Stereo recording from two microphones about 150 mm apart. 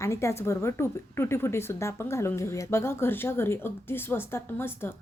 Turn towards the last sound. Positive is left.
turn(degrees=15)  # may be behind; listen again after turning